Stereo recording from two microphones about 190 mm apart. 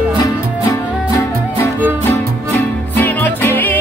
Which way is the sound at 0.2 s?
20° left (ahead or behind).